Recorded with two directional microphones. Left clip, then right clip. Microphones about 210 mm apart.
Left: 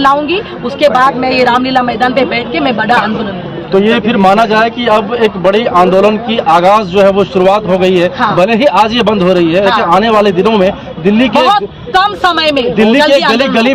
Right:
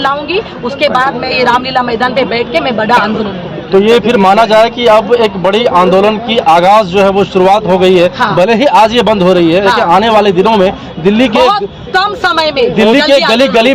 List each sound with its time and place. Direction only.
0.8 s a woman's voice: 5° left (ahead or behind)
3.7 s a man's voice: 45° right (ahead or behind)
11.5 s a woman's voice: 5° left (ahead or behind)
12.7 s a man's voice: 45° right (ahead or behind)